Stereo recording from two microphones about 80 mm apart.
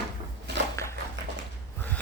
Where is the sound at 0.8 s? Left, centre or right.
Left.